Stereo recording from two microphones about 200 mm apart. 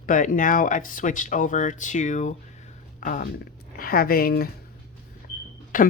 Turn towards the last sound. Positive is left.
turn(degrees=45)  # may be behind; listen again after turning